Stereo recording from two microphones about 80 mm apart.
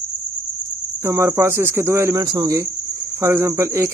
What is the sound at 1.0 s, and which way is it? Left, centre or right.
Speech, right.